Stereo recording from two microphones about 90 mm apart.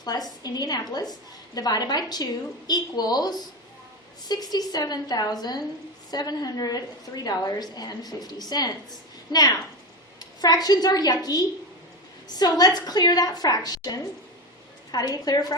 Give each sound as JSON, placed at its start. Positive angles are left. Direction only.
{"t": 0.0, "sound": "a woman's voice", "side_deg": 45}
{"t": 4.5, "sound": "a woman's voice", "side_deg": 45}